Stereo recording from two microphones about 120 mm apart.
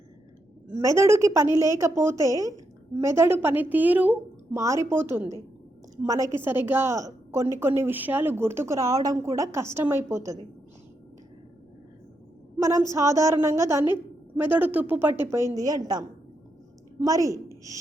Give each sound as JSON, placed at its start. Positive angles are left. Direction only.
{"t": 0.8, "sound": "a woman's voice", "side_deg": -25}
{"t": 12.5, "sound": "a woman's voice", "side_deg": -25}